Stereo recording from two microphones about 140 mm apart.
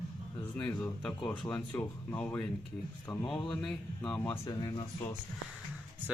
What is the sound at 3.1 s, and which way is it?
Speech, 25° left (ahead or behind).